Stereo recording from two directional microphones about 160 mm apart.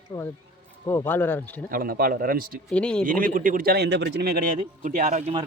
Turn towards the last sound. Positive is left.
turn(degrees=-45)  # may be behind; listen again after turning